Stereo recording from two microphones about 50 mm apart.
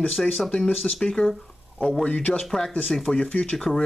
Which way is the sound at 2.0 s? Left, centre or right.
Left.